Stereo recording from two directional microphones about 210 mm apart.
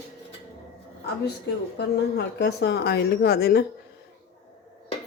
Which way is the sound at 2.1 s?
50° left (ahead or behind).